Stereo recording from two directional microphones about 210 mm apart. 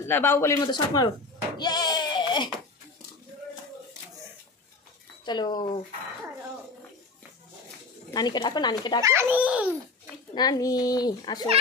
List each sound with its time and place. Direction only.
0.0 s speech: 10° left (ahead or behind)
1.6 s a sound: 20° left (ahead or behind)
5.2 s a child's voice: 20° left (ahead or behind)
8.1 s a child's voice: 20° left (ahead or behind)
9.0 s a child's voice: 10° right (ahead or behind)
10.3 s a child's voice: 20° left (ahead or behind)